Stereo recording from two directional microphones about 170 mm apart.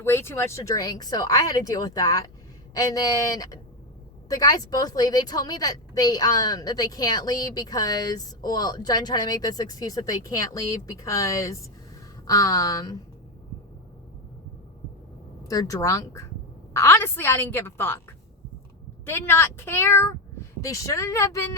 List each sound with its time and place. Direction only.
0.0 s a woman's voice: 15° left (ahead or behind)
15.4 s speech: 20° left (ahead or behind)
19.0 s speech: 15° left (ahead or behind)